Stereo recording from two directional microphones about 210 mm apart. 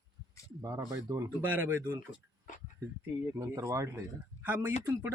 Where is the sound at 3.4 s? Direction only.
15° right (ahead or behind).